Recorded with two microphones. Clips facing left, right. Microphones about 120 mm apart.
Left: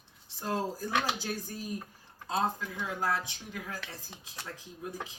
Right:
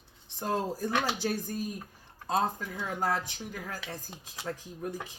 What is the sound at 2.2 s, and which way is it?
Speech, 45° right (ahead or behind).